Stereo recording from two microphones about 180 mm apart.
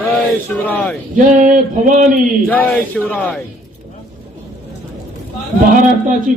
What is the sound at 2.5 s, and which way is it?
Speech, 10° left (ahead or behind).